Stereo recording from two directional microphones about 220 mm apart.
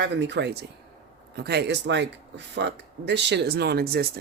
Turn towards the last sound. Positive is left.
turn(degrees=-45)  # may be behind; listen again after turning